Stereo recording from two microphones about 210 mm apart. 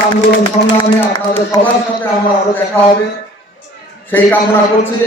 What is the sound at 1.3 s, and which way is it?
Speech, 10° left (ahead or behind).